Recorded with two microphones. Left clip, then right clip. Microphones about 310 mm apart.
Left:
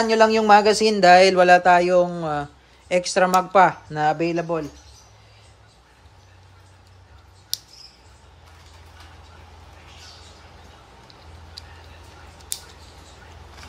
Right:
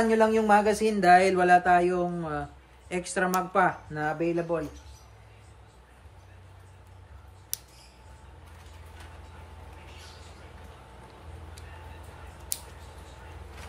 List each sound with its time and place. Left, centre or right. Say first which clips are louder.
0.1 s speech: left 9 dB; left